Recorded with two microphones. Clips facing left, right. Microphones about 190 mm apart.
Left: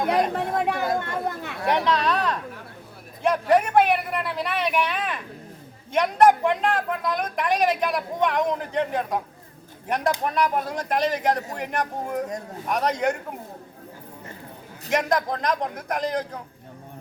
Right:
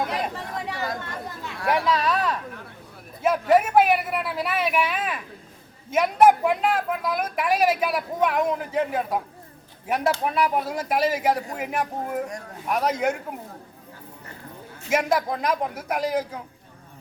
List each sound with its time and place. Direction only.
0.5 s chatter: 55° left (ahead or behind)
1.6 s speech: 5° right (ahead or behind)
14.8 s speech: 5° right (ahead or behind)